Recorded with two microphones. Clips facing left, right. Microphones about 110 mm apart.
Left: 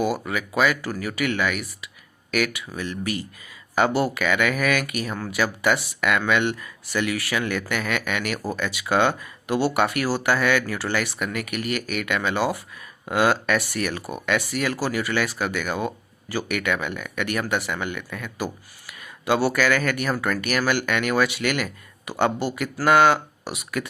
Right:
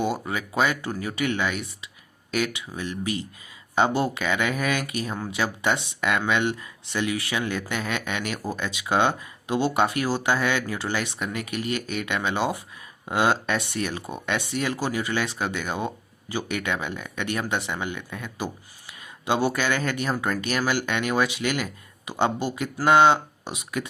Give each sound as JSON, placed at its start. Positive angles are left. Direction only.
{"t": 0.0, "sound": "speech", "side_deg": -25}